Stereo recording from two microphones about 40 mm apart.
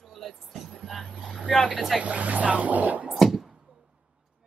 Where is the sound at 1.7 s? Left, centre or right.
Centre.